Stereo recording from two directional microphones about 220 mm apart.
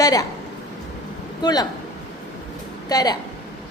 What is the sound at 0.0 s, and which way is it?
Speech, 15° left (ahead or behind).